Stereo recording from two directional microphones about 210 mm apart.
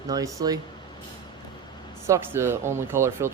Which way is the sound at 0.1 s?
15° right (ahead or behind).